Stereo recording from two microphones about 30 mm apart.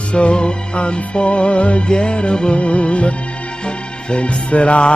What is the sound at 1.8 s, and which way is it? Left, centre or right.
Music, left.